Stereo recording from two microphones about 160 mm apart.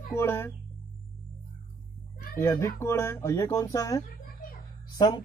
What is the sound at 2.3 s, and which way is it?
Speech, 15° left (ahead or behind).